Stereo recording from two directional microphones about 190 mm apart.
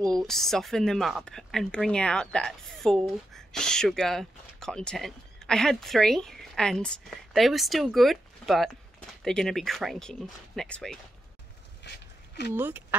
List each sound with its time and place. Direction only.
0.1 s speech: centre (ahead or behind)
11.9 s speech: 65° left (ahead or behind)
12.5 s speech: 10° right (ahead or behind)